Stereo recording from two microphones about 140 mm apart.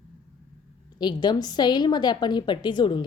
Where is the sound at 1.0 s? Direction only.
30° left (ahead or behind).